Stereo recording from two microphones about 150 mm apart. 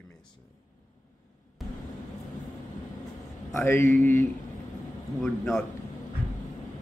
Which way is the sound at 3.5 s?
15° left (ahead or behind).